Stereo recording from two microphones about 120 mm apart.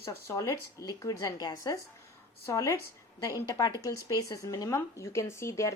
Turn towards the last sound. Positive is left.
turn(degrees=25)  # may be behind; listen again after turning